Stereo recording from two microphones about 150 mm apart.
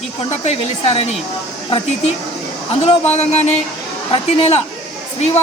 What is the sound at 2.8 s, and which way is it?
Speech, 45° left (ahead or behind).